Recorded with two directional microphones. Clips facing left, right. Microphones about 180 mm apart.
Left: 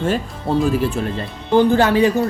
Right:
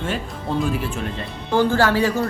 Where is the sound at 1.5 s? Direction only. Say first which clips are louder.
Left 4 dB; 20° left (ahead or behind).